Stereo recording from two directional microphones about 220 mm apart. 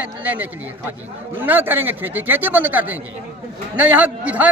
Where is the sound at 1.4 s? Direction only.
10° right (ahead or behind).